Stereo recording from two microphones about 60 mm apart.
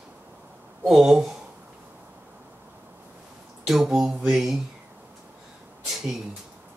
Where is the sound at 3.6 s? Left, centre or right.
Centre.